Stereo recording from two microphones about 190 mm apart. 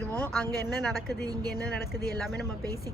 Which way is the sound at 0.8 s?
5° left (ahead or behind).